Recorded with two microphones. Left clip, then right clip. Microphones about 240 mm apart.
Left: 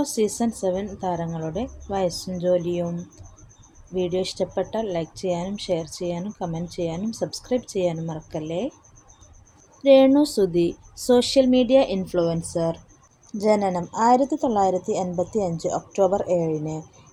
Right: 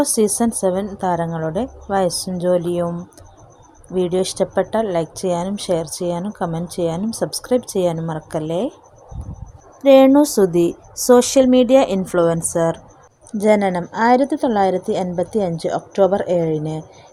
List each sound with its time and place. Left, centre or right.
0.0 s speech: right
3.9 s speech: right
9.8 s speech: right